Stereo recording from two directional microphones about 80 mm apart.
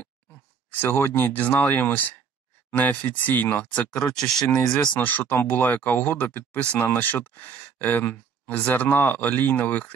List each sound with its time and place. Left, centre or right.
0.7 s speech: left
4.2 s speech: centre
4.9 s speech: left